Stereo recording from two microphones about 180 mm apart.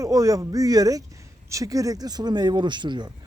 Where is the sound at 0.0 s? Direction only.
20° right (ahead or behind).